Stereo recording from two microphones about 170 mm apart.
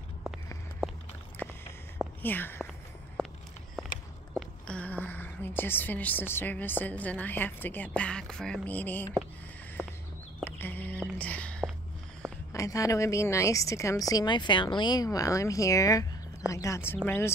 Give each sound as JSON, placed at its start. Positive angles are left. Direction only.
{"t": 2.2, "sound": "a woman's voice", "side_deg": 10}
{"t": 3.2, "sound": "walk", "side_deg": 5}
{"t": 4.4, "sound": "a woman's voice", "side_deg": 5}
{"t": 9.8, "sound": "walk", "side_deg": -15}
{"t": 10.4, "sound": "whispering", "side_deg": 10}
{"t": 12.2, "sound": "a sound", "side_deg": 5}
{"t": 12.5, "sound": "a woman's voice", "side_deg": 20}